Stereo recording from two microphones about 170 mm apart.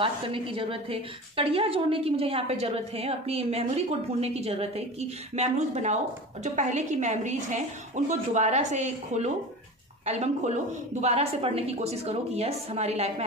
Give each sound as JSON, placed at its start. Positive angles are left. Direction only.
{"t": 0.0, "sound": "a woman's voice", "side_deg": -30}